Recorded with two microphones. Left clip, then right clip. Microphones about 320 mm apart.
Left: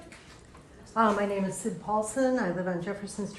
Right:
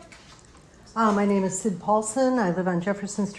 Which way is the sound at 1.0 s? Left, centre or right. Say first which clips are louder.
Right 2 dB; centre.